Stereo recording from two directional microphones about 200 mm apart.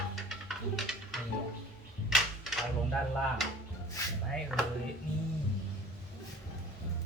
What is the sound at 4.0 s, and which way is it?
Speech, 15° left (ahead or behind).